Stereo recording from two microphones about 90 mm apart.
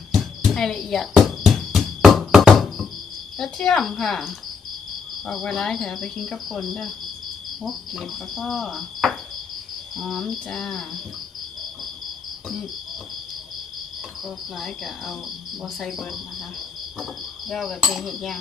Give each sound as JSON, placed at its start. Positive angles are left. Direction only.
{"t": 0.1, "sound": "a sound", "side_deg": 0}
{"t": 3.3, "sound": "speech", "side_deg": 5}
{"t": 15.6, "sound": "speech", "side_deg": 0}